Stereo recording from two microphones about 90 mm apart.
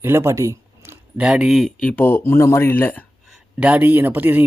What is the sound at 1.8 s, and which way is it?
Speech, 20° left (ahead or behind).